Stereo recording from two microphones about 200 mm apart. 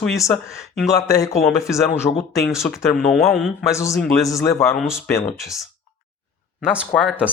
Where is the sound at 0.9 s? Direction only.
15° left (ahead or behind).